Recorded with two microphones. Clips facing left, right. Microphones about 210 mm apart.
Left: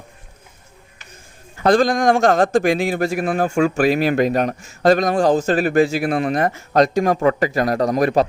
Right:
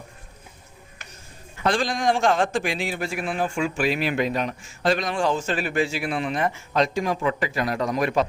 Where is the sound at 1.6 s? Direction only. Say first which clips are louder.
Left 8 dB; 40° left (ahead or behind).